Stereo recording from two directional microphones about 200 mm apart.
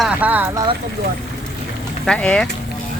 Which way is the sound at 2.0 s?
5° left (ahead or behind).